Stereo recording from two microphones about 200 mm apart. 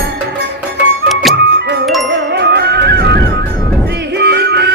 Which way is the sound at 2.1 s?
55° right (ahead or behind).